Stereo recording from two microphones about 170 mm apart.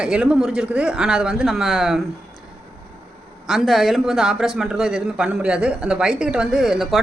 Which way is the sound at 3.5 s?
Centre (ahead or behind).